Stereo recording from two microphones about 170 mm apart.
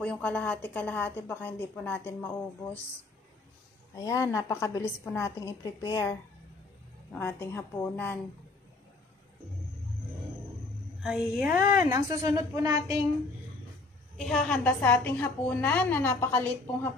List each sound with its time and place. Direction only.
0.0 s a woman's voice: 10° left (ahead or behind)
4.0 s a woman's voice: 20° left (ahead or behind)
11.0 s a woman's voice: centre (ahead or behind)
11.9 s a woman's voice: 20° right (ahead or behind)
14.1 s a woman's voice: 5° left (ahead or behind)